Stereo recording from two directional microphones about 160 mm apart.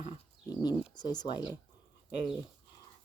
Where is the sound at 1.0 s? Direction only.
25° left (ahead or behind).